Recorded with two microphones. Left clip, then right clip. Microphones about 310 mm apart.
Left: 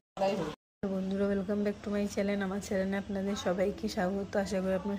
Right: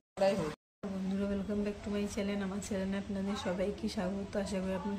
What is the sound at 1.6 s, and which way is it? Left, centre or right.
A woman's voice, centre.